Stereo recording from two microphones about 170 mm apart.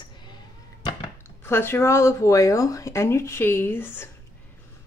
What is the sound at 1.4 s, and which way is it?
A woman's voice, 15° left (ahead or behind).